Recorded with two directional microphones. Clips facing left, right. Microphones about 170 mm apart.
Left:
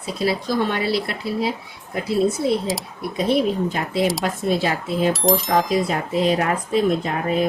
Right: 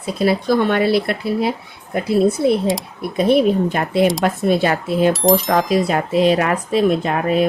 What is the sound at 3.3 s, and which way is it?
Speech, 60° right (ahead or behind).